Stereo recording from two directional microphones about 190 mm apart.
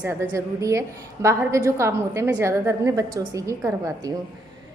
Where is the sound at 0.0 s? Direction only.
10° right (ahead or behind).